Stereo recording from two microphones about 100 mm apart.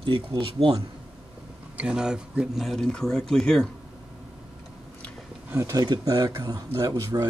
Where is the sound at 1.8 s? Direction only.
10° right (ahead or behind).